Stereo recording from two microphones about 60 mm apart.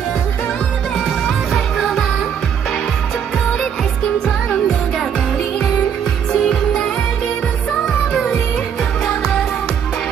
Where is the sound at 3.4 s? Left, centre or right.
Centre.